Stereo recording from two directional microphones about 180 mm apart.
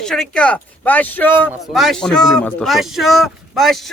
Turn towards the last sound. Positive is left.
turn(degrees=0)  # may be behind; listen again after turning